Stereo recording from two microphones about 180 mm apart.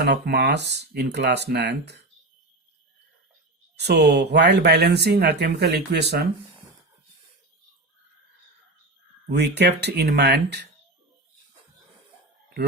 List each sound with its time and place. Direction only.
0.0 s speech: 65° right (ahead or behind)
3.8 s speech: 65° right (ahead or behind)
9.3 s speech: 65° right (ahead or behind)